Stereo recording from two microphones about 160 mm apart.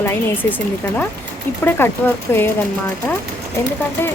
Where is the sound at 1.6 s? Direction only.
15° left (ahead or behind).